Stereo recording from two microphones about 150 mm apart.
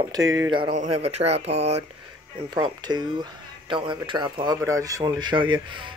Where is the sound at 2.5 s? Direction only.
30° right (ahead or behind).